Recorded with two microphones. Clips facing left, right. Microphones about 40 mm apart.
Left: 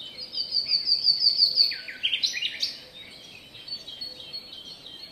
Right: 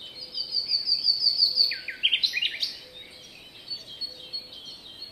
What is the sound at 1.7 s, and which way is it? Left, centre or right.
Bird vocalization, centre.